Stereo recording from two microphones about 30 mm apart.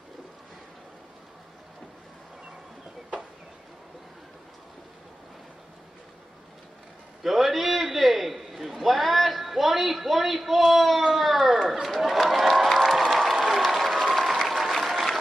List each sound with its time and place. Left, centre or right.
7.2 s a sound: centre
12.0 s crowd: centre
13.5 s applause: centre